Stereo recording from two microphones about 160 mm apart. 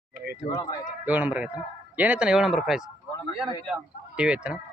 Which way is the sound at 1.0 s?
10° right (ahead or behind).